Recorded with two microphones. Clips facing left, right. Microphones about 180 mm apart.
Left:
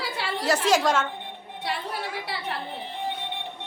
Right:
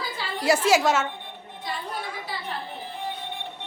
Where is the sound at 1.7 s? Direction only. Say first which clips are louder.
Left 2 dB; 70° left (ahead or behind).